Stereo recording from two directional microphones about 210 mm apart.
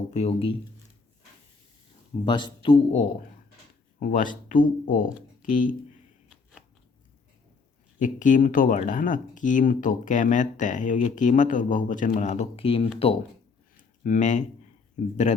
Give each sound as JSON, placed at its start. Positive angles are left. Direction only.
{"t": 0.1, "sound": "a man's voice", "side_deg": 30}
{"t": 2.2, "sound": "a man's voice", "side_deg": 20}
{"t": 4.0, "sound": "speech", "side_deg": 40}
{"t": 7.9, "sound": "speech", "side_deg": 35}
{"t": 13.7, "sound": "a sound", "side_deg": 35}
{"t": 15.0, "sound": "speech", "side_deg": 35}